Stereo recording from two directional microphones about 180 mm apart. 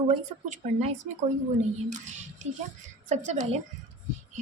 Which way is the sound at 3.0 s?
40° right (ahead or behind).